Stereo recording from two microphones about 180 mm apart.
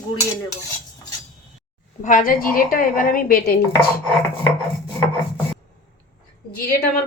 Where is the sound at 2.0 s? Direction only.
45° left (ahead or behind).